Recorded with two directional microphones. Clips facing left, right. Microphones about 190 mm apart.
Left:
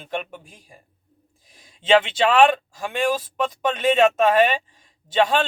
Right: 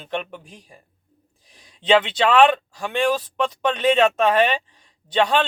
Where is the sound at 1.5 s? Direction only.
45° left (ahead or behind).